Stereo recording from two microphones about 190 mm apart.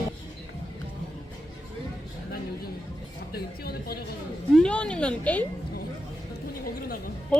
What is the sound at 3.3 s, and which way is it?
Speech, 55° left (ahead or behind).